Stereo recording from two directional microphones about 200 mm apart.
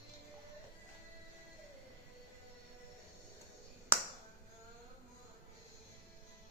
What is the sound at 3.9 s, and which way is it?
Finger snapping, 10° right (ahead or behind).